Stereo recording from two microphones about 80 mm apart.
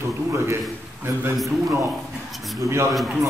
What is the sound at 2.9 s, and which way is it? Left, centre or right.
Speech, centre.